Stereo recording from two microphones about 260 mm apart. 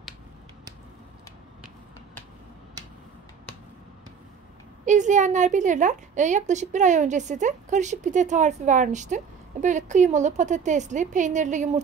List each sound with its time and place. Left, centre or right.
4.8 s a woman's voice: right